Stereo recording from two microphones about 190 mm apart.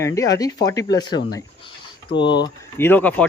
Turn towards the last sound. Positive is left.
turn(degrees=10)  # may be behind; listen again after turning